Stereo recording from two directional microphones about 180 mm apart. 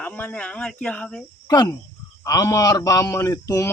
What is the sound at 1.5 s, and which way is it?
Speech, 20° left (ahead or behind).